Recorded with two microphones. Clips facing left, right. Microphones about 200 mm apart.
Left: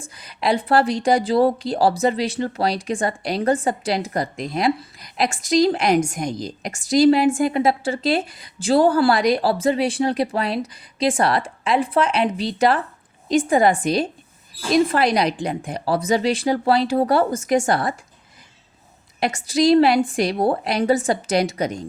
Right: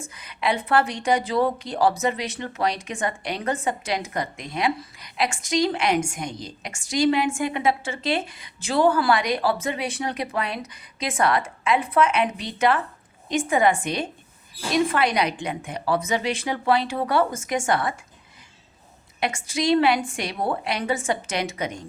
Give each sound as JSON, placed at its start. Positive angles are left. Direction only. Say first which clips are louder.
{"t": 0.1, "sound": "speech", "louder": "left 4 dB", "side_deg": 35}
{"t": 19.2, "sound": "speech", "louder": "left 7 dB", "side_deg": 35}